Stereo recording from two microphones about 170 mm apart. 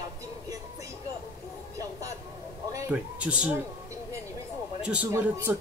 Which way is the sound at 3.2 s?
5° right (ahead or behind).